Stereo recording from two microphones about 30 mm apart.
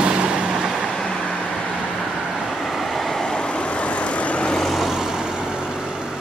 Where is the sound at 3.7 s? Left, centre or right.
Left.